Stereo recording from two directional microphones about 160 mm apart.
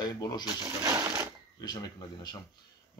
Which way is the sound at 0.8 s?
20° right (ahead or behind).